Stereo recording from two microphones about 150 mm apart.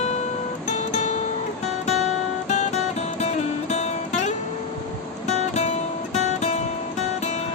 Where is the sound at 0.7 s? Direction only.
50° left (ahead or behind).